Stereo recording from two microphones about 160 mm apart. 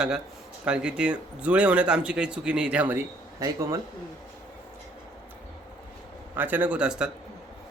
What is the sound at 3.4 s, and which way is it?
Speech, 20° right (ahead or behind).